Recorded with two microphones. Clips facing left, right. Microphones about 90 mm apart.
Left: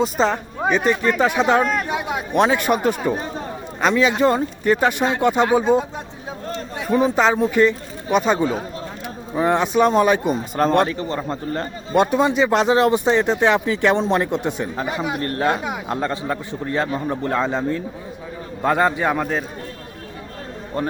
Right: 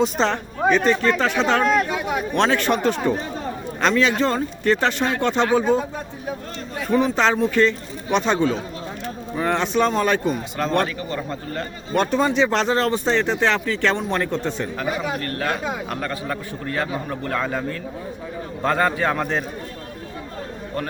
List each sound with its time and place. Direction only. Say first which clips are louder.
0.0 s speech: left 1 dB; 5° left (ahead or behind)
6.7 s a sound: left 1 dB; 20° left (ahead or behind)
7.3 s speech: left 2 dB; 15° left (ahead or behind)
10.8 s a man's voice: left 3 dB; 30° left (ahead or behind)
11.9 s a man's voice: left 2 dB; 10° left (ahead or behind)
19.2 s a man's voice: left 1 dB; centre (ahead or behind)